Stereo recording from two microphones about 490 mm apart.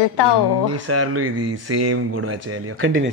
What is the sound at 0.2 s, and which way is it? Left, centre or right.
Speech, left.